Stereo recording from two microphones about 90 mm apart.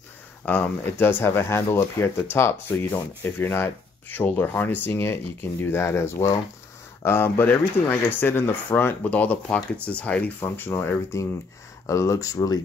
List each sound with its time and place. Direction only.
0.5 s speech: 20° left (ahead or behind)
11.8 s speech: 35° left (ahead or behind)